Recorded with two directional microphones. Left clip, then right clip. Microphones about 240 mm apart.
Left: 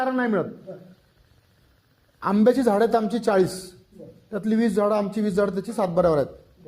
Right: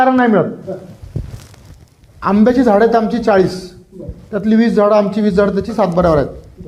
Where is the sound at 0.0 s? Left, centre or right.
Left.